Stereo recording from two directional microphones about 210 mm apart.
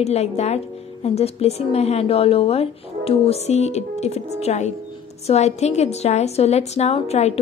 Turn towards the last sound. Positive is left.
turn(degrees=30)  # may be behind; listen again after turning